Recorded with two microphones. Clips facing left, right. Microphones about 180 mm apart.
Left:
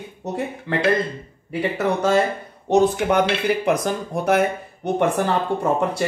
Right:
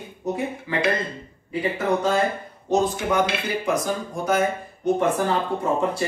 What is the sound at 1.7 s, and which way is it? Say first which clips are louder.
Speech: left 3 dB; 75° left (ahead or behind).